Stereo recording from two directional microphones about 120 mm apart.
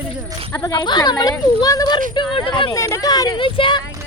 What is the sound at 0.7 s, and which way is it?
A child's voice, 35° left (ahead or behind).